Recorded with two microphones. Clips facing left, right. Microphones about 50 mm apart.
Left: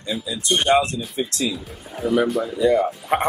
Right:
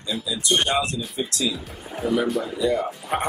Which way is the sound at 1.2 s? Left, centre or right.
Left.